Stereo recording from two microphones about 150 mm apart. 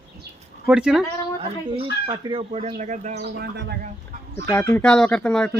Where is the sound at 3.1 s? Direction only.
90° right.